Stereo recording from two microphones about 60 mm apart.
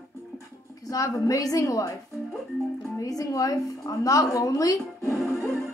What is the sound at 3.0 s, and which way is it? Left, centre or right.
A woman's voice, left.